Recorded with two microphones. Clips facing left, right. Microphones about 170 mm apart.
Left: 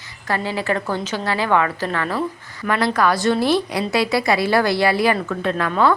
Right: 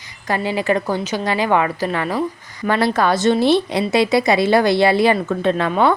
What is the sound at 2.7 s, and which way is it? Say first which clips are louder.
A woman's voice: right 2 dB; 25° right (ahead or behind).